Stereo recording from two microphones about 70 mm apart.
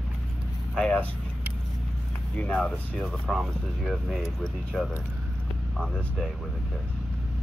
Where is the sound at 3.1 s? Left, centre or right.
Centre.